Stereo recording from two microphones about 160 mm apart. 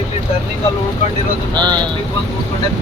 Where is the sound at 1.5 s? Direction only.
30° right (ahead or behind).